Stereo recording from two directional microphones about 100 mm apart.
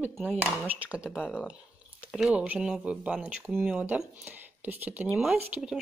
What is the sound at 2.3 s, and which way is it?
Speech, 15° right (ahead or behind).